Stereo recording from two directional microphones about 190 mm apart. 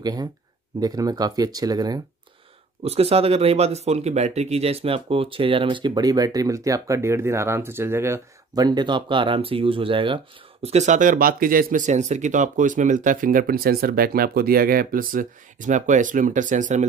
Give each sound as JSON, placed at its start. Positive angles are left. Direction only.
{"t": 0.0, "sound": "speech", "side_deg": -20}
{"t": 2.8, "sound": "speech", "side_deg": -30}